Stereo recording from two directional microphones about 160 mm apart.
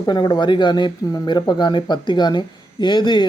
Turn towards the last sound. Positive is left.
turn(degrees=30)  # may be behind; listen again after turning